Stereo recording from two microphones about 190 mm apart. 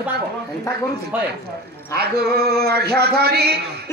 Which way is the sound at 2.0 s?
55° right (ahead or behind).